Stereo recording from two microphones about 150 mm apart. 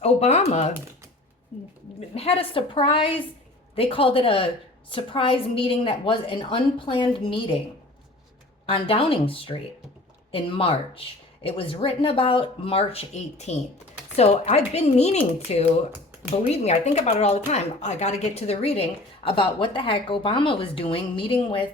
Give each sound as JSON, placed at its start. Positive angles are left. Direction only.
{"t": 0.0, "sound": "speech", "side_deg": 45}
{"t": 2.0, "sound": "a woman's voice", "side_deg": 45}
{"t": 8.6, "sound": "a woman's voice", "side_deg": 40}